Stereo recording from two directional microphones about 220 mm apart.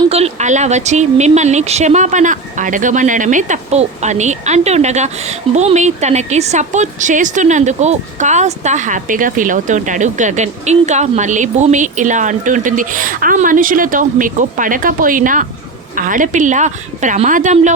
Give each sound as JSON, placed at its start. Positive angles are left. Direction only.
{"t": 0.1, "sound": "a woman's voice", "side_deg": -30}